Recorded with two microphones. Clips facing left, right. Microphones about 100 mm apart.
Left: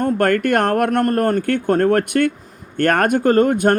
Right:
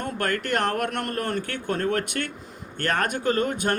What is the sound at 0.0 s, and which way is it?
Speech, 50° left (ahead or behind).